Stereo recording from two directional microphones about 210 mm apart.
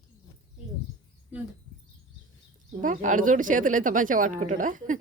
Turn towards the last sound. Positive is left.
turn(degrees=-40)  # may be behind; listen again after turning